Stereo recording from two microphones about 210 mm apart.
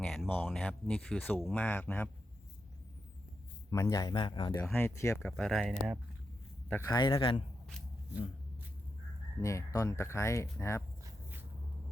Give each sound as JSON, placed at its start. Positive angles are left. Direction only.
{"t": 0.0, "sound": "speech", "side_deg": 5}
{"t": 3.7, "sound": "speech", "side_deg": 15}
{"t": 4.6, "sound": "speech", "side_deg": 10}
{"t": 6.7, "sound": "speech", "side_deg": 10}
{"t": 9.4, "sound": "speech", "side_deg": 15}
{"t": 11.0, "sound": "duck", "side_deg": -10}